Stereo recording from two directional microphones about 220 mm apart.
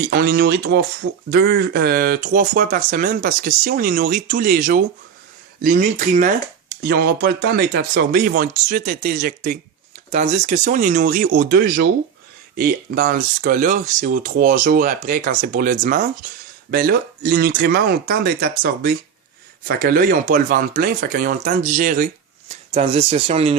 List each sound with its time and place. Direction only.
0.1 s speech: 45° right (ahead or behind); by 23.6 s 25° right (ahead or behind)